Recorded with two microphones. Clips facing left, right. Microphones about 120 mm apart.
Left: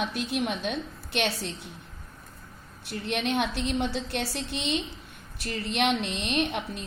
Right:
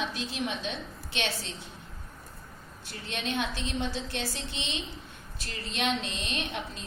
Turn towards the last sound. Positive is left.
turn(degrees=65)  # may be behind; listen again after turning